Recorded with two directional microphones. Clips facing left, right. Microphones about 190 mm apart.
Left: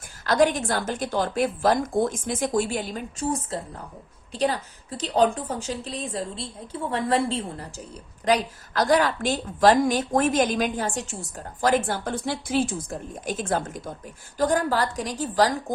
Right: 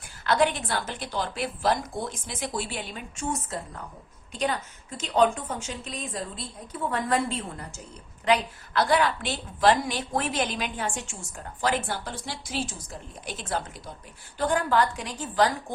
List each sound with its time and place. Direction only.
0.3 s a woman's voice: 40° left (ahead or behind)